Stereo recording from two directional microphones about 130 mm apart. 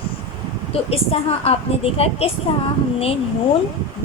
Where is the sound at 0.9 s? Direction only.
50° left (ahead or behind).